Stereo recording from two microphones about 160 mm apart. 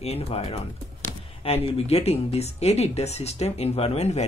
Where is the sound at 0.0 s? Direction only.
40° left (ahead or behind).